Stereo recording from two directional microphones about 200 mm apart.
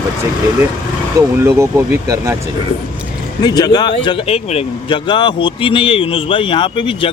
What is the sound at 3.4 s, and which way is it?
A man's voice, 20° left (ahead or behind).